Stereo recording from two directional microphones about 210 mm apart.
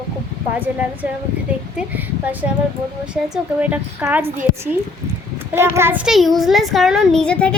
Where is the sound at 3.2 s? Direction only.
5° right (ahead or behind).